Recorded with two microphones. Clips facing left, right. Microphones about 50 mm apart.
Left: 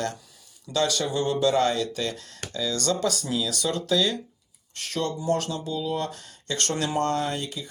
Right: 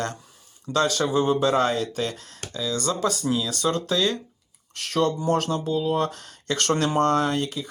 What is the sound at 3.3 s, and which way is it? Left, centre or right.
Speech, right.